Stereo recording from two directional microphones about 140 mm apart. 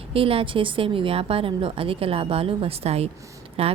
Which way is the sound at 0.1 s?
40° right (ahead or behind).